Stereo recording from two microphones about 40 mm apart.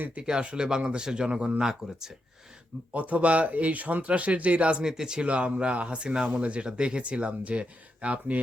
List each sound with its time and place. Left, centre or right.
0.2 s speech: right
2.9 s speech: right
4.8 s speech: centre
5.2 s speech: right